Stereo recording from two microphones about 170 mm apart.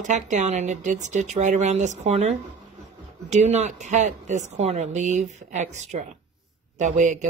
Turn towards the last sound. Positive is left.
turn(degrees=-45)  # may be behind; listen again after turning